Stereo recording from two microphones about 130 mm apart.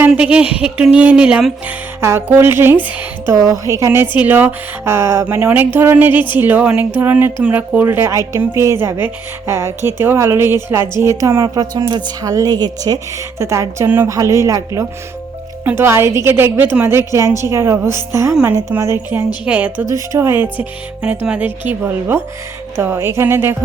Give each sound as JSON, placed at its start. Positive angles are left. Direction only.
{"t": 0.1, "sound": "a woman's voice", "side_deg": -10}
{"t": 3.3, "sound": "a woman's voice", "side_deg": -25}
{"t": 19.5, "sound": "a woman's voice", "side_deg": -10}